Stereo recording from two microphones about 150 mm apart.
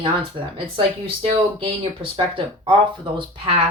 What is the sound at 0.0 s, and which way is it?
Speech, 35° right (ahead or behind).